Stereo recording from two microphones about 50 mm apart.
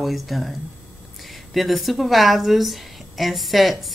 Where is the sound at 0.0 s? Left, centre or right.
Centre.